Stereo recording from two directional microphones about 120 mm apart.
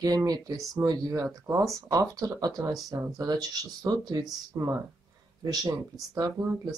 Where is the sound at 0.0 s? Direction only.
30° right (ahead or behind).